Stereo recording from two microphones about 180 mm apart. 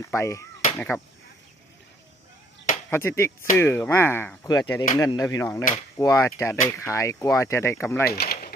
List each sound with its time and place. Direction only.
0.0 s speech: 15° left (ahead or behind)
2.9 s speech: 15° left (ahead or behind)
8.0 s a sound: 60° left (ahead or behind)